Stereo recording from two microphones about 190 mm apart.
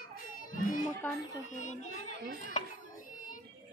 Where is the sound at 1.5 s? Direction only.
40° left (ahead or behind).